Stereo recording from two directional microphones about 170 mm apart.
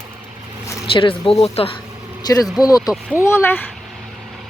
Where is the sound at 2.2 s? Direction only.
20° left (ahead or behind).